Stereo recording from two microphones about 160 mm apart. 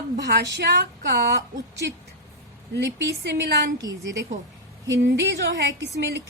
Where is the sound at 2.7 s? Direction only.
90° right.